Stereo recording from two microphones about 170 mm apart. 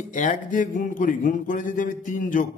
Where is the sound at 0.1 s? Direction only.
50° left (ahead or behind).